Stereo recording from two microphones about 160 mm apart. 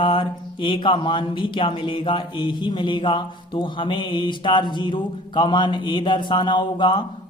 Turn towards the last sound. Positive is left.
turn(degrees=25)  # may be behind; listen again after turning